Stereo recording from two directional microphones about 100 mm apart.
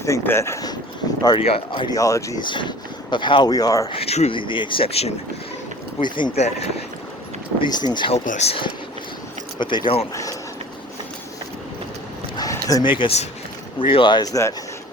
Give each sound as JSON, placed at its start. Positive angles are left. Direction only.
{"t": 0.0, "sound": "speech", "side_deg": 30}
{"t": 1.4, "sound": "speech", "side_deg": 65}
{"t": 1.9, "sound": "speech", "side_deg": 35}
{"t": 2.4, "sound": "speech", "side_deg": 50}
{"t": 3.5, "sound": "speech", "side_deg": 35}
{"t": 3.8, "sound": "speech", "side_deg": 80}
{"t": 6.0, "sound": "speech", "side_deg": 50}
{"t": 6.3, "sound": "speech", "side_deg": 90}
{"t": 7.6, "sound": "speech", "side_deg": 45}
{"t": 8.1, "sound": "speech", "side_deg": 90}
{"t": 9.6, "sound": "speech", "side_deg": 55}
{"t": 12.4, "sound": "a sound", "side_deg": 35}
{"t": 12.8, "sound": "speech", "side_deg": 55}
{"t": 14.2, "sound": "speech", "side_deg": 35}